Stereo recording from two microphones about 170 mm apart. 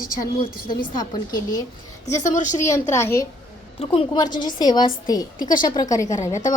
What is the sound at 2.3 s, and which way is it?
Speech, 45° left (ahead or behind).